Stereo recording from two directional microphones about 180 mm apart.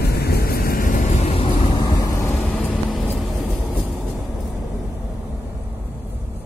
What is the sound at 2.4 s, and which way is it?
Vehicle, centre (ahead or behind).